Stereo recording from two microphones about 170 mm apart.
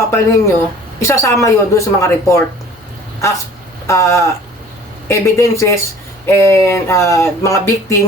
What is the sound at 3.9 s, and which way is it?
Speech, 15° left (ahead or behind).